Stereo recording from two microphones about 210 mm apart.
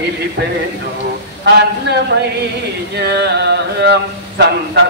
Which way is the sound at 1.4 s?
55° right (ahead or behind).